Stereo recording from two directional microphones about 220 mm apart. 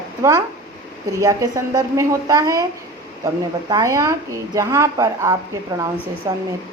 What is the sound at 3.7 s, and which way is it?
A woman's voice, 15° right (ahead or behind).